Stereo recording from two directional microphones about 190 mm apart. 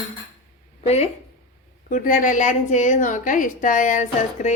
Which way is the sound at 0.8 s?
35° left (ahead or behind).